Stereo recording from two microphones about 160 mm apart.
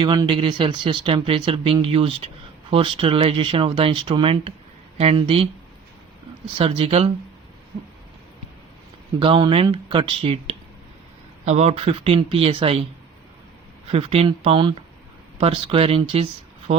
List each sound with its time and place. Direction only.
0.0 s speech: 30° right (ahead or behind)
6.6 s speech: 35° right (ahead or behind)
9.1 s speech: 35° right (ahead or behind)
13.8 s speech: 40° right (ahead or behind)